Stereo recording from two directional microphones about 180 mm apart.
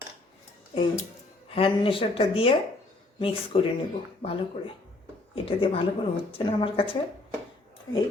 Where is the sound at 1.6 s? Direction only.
30° left (ahead or behind).